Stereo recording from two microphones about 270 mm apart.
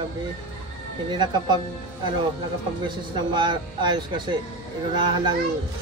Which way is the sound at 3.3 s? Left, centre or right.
Centre.